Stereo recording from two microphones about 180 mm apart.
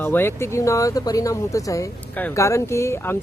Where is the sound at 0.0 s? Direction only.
10° left (ahead or behind).